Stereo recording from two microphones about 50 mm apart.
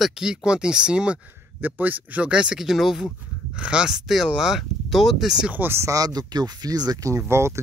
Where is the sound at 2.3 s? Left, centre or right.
Centre.